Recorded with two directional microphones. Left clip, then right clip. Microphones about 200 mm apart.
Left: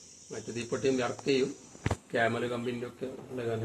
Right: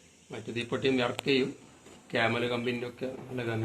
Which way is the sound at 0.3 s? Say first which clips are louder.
Right 1 dB; 40° right (ahead or behind).